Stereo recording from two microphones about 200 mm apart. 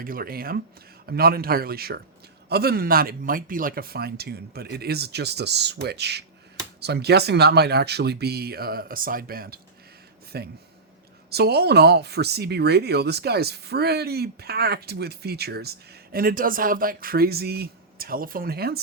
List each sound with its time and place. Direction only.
0.0 s speech: 45° right (ahead or behind)